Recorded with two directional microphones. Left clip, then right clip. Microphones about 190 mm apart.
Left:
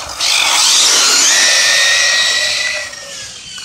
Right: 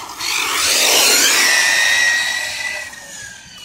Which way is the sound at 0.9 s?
15° right (ahead or behind).